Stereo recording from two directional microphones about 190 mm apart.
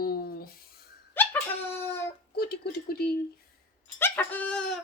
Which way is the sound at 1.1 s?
10° left (ahead or behind).